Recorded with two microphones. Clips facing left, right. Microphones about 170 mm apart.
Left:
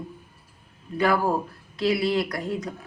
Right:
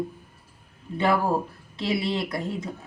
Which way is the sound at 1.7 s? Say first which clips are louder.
Left 4 dB; 25° right (ahead or behind).